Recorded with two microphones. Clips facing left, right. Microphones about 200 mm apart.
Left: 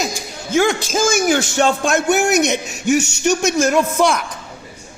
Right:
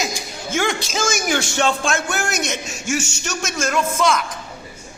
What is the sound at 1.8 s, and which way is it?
Speech, 20° left (ahead or behind).